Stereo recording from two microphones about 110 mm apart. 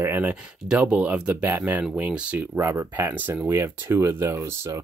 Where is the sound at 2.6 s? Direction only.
20° right (ahead or behind).